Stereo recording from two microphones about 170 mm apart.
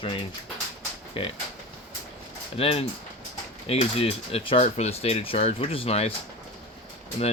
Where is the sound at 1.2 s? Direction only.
35° left (ahead or behind).